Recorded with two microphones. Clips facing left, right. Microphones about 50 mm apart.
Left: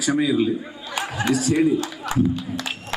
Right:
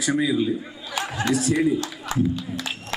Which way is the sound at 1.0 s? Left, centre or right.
Centre.